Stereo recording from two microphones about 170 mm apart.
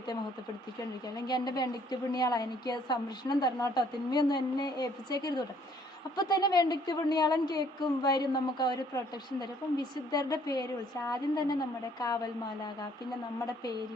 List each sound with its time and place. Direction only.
1.3 s a woman's voice: 25° left (ahead or behind)